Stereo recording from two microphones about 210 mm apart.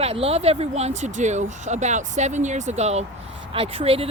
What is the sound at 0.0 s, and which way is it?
Speech, 30° right (ahead or behind).